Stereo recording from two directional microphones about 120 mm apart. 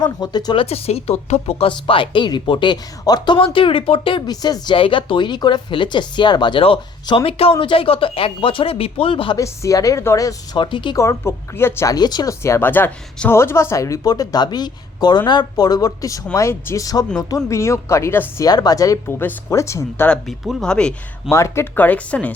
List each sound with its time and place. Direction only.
0.0 s a woman's voice: 35° left (ahead or behind)
0.6 s speech: 55° left (ahead or behind)
4.3 s a woman's voice: 35° left (ahead or behind)
6.6 s speech: 50° left (ahead or behind)
9.4 s a woman's voice: 25° left (ahead or behind)
10.6 s speech: 40° left (ahead or behind)
10.9 s a woman's voice: 25° left (ahead or behind)
11.9 s a woman's voice: 35° left (ahead or behind)
18.4 s a woman's voice: 30° left (ahead or behind)
20.1 s speech: 5° left (ahead or behind)
21.2 s speech: 25° left (ahead or behind)